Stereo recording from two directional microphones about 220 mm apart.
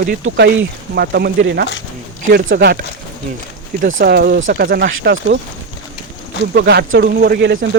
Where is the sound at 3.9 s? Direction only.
60° right (ahead or behind).